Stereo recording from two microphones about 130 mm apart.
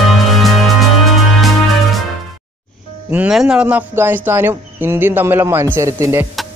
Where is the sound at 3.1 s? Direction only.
5° right (ahead or behind).